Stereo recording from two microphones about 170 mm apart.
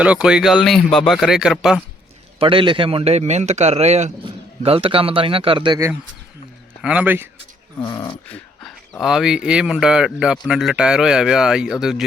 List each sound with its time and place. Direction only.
0.0 s speech: 5° right (ahead or behind)
2.4 s a man's voice: 30° right (ahead or behind)
6.8 s speech: 10° right (ahead or behind)
7.8 s speech: 25° left (ahead or behind)
8.3 s speech: 5° left (ahead or behind)